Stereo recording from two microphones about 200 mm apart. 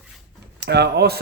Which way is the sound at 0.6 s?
55° right (ahead or behind).